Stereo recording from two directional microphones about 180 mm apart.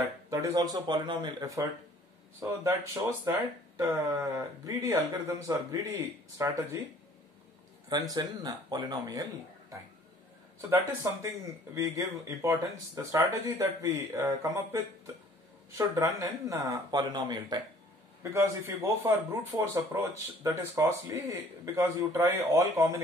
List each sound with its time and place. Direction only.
0.3 s speech: 20° right (ahead or behind)
7.9 s speech: 20° right (ahead or behind)
15.8 s speech: 20° right (ahead or behind)